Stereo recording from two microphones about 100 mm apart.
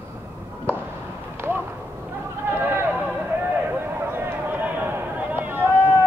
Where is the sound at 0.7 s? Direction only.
20° right (ahead or behind).